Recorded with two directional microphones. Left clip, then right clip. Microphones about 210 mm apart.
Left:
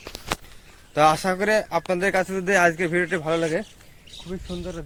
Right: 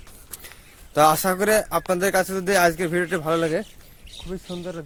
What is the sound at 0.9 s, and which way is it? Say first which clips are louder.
Speech: right 1 dB; 25° right (ahead or behind).